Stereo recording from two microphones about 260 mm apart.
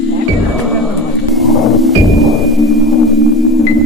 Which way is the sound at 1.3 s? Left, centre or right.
Centre.